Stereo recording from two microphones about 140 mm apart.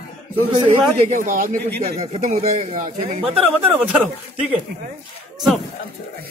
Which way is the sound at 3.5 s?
15° right (ahead or behind).